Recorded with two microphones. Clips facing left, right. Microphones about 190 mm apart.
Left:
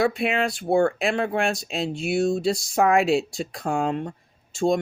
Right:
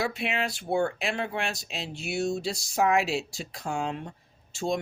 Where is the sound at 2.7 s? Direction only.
55° left (ahead or behind).